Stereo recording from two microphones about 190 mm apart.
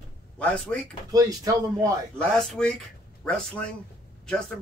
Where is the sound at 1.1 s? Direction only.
20° right (ahead or behind).